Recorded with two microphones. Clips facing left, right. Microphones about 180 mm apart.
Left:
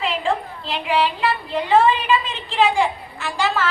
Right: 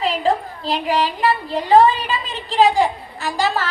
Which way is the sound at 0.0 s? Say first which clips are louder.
Right 3 dB; 40° right (ahead or behind).